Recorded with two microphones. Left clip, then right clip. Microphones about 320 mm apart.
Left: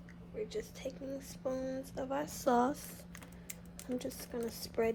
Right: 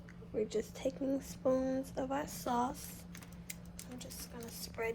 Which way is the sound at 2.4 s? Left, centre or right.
Left.